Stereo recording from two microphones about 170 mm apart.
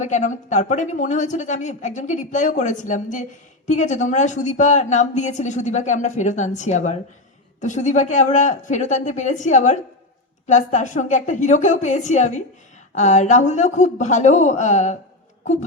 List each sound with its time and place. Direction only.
0.0 s a woman's voice: 45° left (ahead or behind)